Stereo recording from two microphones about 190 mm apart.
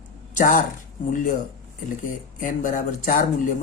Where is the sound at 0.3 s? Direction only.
45° left (ahead or behind).